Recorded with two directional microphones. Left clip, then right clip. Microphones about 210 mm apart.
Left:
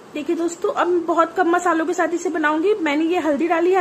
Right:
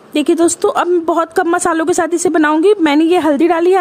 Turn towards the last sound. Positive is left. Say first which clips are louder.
# right 7 dB
turn(degrees=-55)  # may be behind; listen again after turning